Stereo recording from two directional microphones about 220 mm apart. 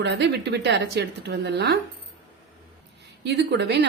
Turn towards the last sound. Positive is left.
turn(degrees=-50)  # may be behind; listen again after turning